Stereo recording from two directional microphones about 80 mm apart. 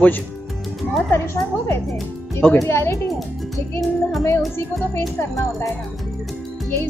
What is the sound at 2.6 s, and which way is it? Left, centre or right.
Music, left.